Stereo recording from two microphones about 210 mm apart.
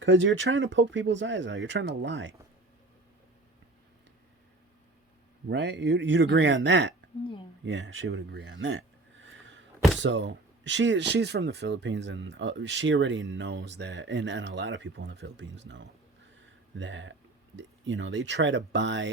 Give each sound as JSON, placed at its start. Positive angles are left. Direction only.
{"t": 0.0, "sound": "speech", "side_deg": -65}
{"t": 5.5, "sound": "speech", "side_deg": -55}
{"t": 7.6, "sound": "a sound", "side_deg": -65}
{"t": 10.0, "sound": "speech", "side_deg": -60}